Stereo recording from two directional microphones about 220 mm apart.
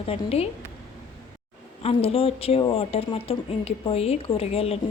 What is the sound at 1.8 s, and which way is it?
Speech, 25° left (ahead or behind).